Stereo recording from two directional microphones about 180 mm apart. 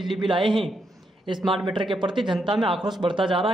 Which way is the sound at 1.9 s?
25° right (ahead or behind).